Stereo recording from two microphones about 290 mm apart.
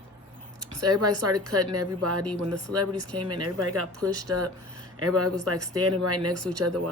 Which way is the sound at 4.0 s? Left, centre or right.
Centre.